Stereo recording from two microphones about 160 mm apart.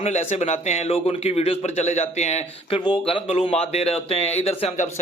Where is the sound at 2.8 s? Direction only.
30° left (ahead or behind).